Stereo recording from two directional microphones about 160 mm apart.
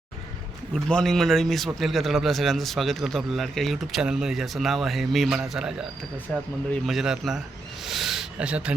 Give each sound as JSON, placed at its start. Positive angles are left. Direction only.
{"t": 0.7, "sound": "a man's voice", "side_deg": 5}
{"t": 6.3, "sound": "a man's voice", "side_deg": 5}